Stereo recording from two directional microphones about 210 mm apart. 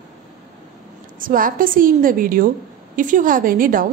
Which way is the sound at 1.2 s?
40° right (ahead or behind).